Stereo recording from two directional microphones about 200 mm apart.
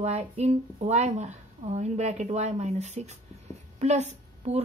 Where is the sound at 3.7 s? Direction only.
35° right (ahead or behind).